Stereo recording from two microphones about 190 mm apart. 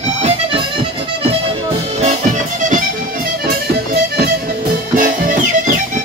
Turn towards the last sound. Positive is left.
turn(degrees=-45)  # may be behind; listen again after turning